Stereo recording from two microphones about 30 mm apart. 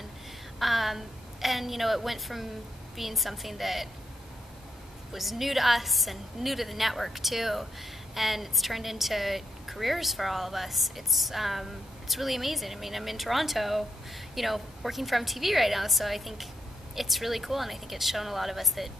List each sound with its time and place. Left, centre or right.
0.6 s a woman's voice: centre
5.1 s a woman's voice: centre